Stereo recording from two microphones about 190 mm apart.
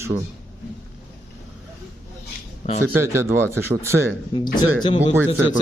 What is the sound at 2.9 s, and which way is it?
Speech, 15° right (ahead or behind).